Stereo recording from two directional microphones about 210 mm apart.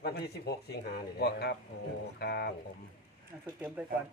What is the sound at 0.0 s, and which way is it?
Speech, 50° left (ahead or behind).